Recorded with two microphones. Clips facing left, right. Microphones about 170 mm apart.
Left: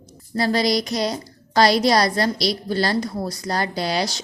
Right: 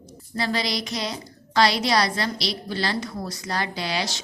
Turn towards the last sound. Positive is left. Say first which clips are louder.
# left 5 dB
turn(degrees=40)  # may be behind; listen again after turning